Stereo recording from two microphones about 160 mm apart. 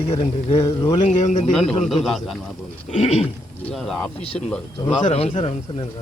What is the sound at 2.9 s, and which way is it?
Speech, 45° left (ahead or behind).